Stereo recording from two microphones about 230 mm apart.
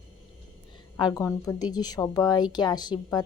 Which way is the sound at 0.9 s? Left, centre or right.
Centre.